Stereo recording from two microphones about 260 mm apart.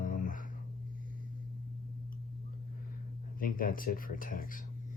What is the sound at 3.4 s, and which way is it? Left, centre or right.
Speech, left.